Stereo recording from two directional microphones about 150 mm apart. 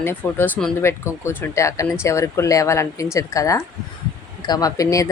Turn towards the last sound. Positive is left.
turn(degrees=20)  # may be behind; listen again after turning